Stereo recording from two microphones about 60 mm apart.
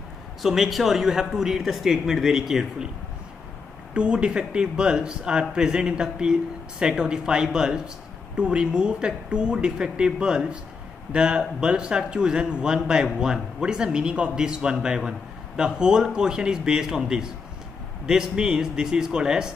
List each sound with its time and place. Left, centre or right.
0.4 s speech: centre
3.9 s speech: centre